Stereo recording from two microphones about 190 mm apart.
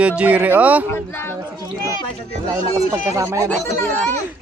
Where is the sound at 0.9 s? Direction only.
10° left (ahead or behind).